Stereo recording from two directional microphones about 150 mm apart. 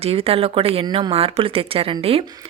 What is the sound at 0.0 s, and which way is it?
Speech, 40° right (ahead or behind).